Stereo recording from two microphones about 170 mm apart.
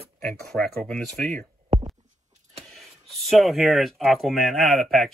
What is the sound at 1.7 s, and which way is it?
Heart sounds, 45° right (ahead or behind).